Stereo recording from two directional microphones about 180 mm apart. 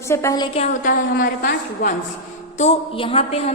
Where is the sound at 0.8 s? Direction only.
50° left (ahead or behind).